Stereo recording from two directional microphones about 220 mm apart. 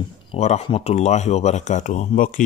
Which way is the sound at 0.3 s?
25° left (ahead or behind).